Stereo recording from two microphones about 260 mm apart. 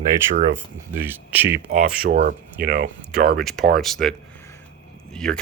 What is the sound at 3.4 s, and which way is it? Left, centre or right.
Speech, centre.